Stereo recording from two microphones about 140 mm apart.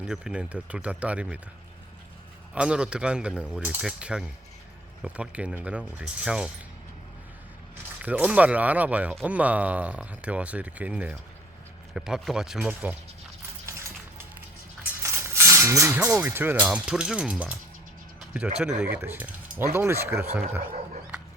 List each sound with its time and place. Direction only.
0.0 s speech: 5° right (ahead or behind)
2.6 s speech: 5° right (ahead or behind)
8.0 s speech: 10° right (ahead or behind)
15.0 s music: 20° right (ahead or behind)
16.1 s speech: 10° right (ahead or behind)
20.6 s dog: 65° right (ahead or behind)